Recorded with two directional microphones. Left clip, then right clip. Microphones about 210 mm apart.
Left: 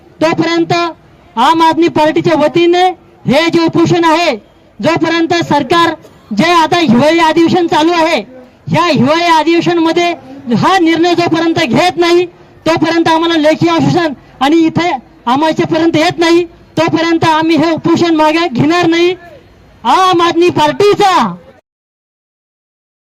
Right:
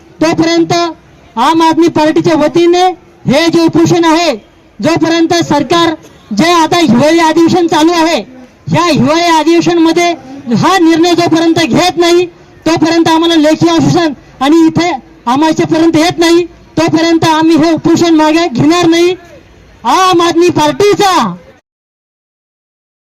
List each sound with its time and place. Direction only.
0.2 s a man's voice: 20° right (ahead or behind)